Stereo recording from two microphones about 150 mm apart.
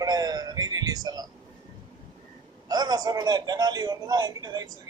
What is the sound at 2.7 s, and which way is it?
Speech, 25° right (ahead or behind).